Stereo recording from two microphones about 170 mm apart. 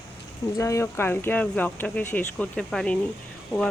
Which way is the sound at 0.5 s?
20° left (ahead or behind).